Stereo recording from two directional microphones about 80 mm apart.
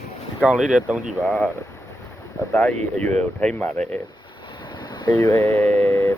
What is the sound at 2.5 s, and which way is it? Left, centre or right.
Speech, centre.